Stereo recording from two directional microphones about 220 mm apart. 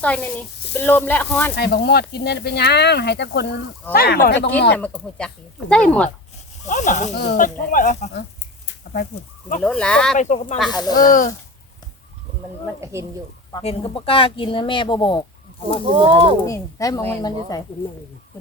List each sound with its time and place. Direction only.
0.0 s a woman's voice: 5° left (ahead or behind)
1.5 s speech: 45° left (ahead or behind)
4.7 s speech: 5° left (ahead or behind)
6.7 s speech: 35° left (ahead or behind)
8.6 s a sound: 45° left (ahead or behind)
9.6 s speech: 5° left (ahead or behind)
10.2 s speech: 30° left (ahead or behind)
10.7 s a woman's voice: 20° left (ahead or behind)
10.9 s speech: 35° left (ahead or behind)
12.8 s speech: 10° right (ahead or behind)
13.6 s speech: 25° left (ahead or behind)
16.0 s speech: 25° right (ahead or behind)
16.5 s a woman's voice: 15° left (ahead or behind)